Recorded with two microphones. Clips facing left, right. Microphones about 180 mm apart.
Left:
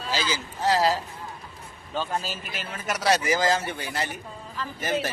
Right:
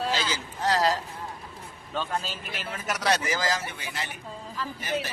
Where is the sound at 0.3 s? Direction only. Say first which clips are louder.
Left 3 dB; 5° left (ahead or behind).